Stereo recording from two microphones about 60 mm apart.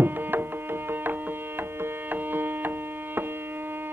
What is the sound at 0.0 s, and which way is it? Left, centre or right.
Music, right.